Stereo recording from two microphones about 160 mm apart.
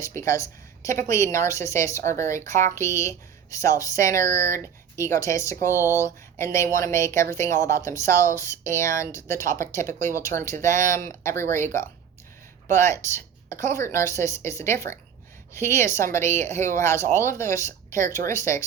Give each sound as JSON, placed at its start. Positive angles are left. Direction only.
{"t": 0.0, "sound": "a woman's voice", "side_deg": 15}